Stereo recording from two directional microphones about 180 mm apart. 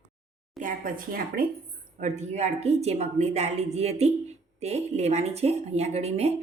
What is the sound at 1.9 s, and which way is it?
Speech, 40° right (ahead or behind).